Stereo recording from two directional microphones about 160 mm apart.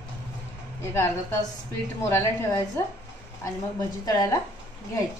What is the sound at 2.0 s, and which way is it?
Speech, 15° left (ahead or behind).